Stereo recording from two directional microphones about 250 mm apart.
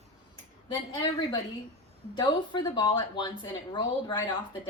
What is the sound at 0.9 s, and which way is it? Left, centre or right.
A woman's voice, centre.